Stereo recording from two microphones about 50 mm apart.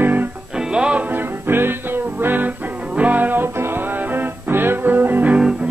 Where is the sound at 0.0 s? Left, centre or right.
Right.